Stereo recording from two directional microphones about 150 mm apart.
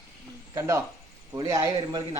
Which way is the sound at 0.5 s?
20° right (ahead or behind).